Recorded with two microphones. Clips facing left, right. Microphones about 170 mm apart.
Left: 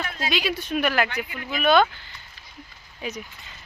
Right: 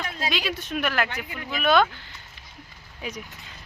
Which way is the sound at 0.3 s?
5° left (ahead or behind).